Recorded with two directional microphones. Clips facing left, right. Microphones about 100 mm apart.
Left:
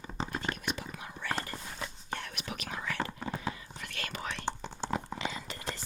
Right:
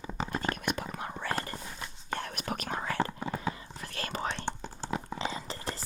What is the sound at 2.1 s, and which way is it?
Whispering, 40° right (ahead or behind).